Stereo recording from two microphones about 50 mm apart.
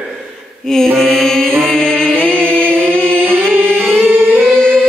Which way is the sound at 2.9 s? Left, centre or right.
Left.